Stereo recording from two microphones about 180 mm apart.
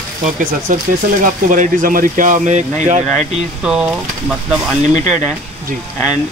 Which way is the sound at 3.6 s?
5° right (ahead or behind).